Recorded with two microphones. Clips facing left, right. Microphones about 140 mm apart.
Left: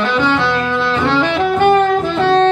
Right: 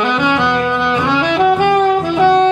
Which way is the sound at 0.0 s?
15° right (ahead or behind).